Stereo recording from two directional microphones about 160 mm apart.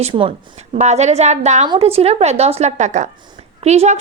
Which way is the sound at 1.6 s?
35° right (ahead or behind).